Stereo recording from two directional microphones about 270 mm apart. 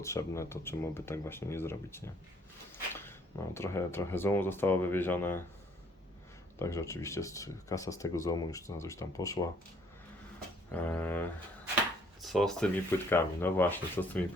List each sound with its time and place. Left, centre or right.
0.0 s speech: centre
6.6 s speech: centre
10.7 s speech: centre